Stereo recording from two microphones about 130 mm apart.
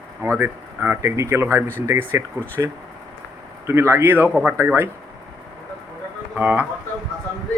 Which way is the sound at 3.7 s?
20° right (ahead or behind).